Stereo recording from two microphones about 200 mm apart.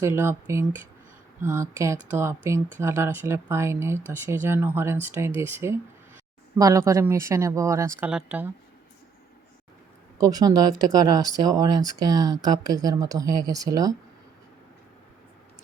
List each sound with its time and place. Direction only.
0.0 s speech: 10° right (ahead or behind)
10.2 s speech: 20° right (ahead or behind)